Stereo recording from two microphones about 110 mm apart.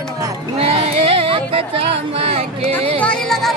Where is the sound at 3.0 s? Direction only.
5° left (ahead or behind).